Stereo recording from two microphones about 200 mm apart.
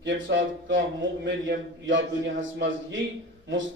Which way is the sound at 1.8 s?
70° right (ahead or behind).